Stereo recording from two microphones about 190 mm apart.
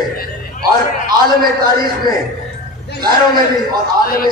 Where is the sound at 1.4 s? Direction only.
50° right (ahead or behind).